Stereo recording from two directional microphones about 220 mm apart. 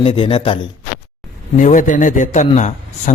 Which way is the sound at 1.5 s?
35° left (ahead or behind).